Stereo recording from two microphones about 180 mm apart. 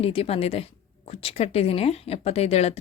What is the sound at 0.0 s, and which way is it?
Speech, 35° left (ahead or behind).